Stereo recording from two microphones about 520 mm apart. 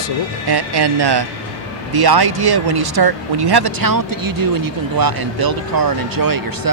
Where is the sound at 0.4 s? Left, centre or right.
Right.